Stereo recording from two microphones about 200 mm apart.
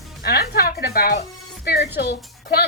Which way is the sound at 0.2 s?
50° left (ahead or behind).